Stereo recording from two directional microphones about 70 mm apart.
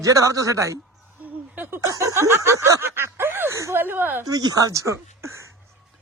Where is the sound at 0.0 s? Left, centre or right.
Right.